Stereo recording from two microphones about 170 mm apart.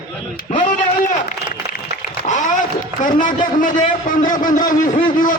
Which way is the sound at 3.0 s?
50° left (ahead or behind).